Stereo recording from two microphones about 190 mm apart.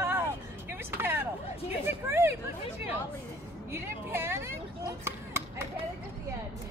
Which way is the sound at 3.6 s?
15° right (ahead or behind).